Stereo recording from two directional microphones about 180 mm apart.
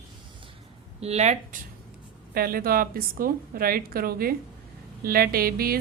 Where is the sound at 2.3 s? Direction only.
55° right (ahead or behind).